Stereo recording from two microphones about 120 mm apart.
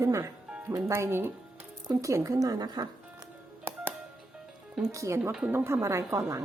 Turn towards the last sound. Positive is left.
turn(degrees=-25)  # may be behind; listen again after turning